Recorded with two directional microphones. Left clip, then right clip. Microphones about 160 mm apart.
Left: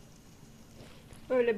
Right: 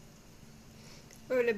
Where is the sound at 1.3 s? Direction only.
20° left (ahead or behind).